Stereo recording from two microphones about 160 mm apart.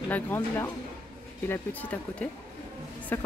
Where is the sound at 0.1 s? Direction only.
15° left (ahead or behind).